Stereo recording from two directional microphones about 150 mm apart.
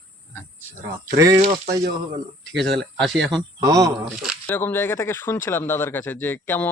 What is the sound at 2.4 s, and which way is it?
Speech, 5° left (ahead or behind).